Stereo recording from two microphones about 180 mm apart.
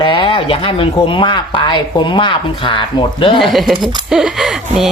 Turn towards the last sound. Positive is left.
turn(degrees=0)  # may be behind; listen again after turning